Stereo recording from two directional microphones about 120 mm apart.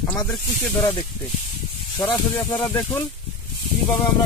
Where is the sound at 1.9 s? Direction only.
30° left (ahead or behind).